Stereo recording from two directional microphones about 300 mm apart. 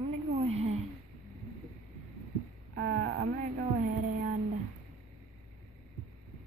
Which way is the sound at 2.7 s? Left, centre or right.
Right.